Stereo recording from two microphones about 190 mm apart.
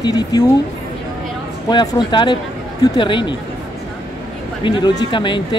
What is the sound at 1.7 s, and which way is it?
Speech, 25° left (ahead or behind).